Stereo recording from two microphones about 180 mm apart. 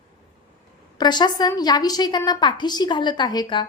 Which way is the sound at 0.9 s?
25° left (ahead or behind).